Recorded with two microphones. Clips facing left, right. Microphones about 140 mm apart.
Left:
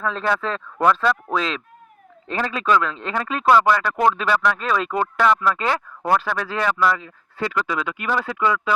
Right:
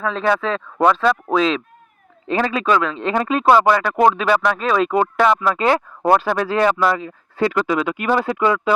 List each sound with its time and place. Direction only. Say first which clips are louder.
0.0 s speech: right 3 dB; centre (ahead or behind)
0.3 s speech: right 6 dB; 15° right (ahead or behind)
1.3 s speech: right 6 dB; 25° right (ahead or behind)
2.3 s speech: right 3 dB; 15° right (ahead or behind)